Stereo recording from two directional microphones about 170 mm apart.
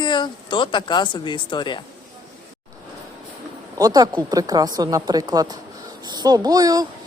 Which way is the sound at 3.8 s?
20° right (ahead or behind).